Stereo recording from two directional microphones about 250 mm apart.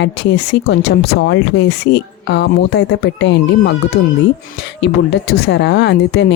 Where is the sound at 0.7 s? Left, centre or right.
Left.